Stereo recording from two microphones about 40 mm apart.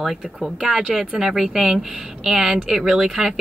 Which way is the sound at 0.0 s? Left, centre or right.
Centre.